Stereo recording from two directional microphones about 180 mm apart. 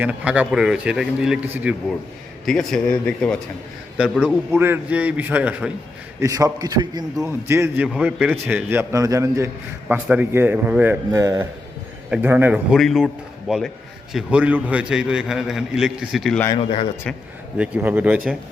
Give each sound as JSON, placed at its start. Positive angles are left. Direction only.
{"t": 0.0, "sound": "a man's voice", "side_deg": -10}
{"t": 6.1, "sound": "a man's voice", "side_deg": -20}
{"t": 16.6, "sound": "a man's voice", "side_deg": 30}
{"t": 17.6, "sound": "a man's voice", "side_deg": -10}